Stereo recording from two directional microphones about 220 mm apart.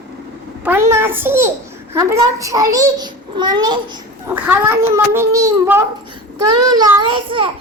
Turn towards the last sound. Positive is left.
turn(degrees=-20)  # may be behind; listen again after turning